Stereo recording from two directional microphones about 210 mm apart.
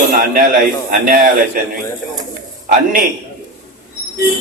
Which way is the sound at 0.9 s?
40° right (ahead or behind).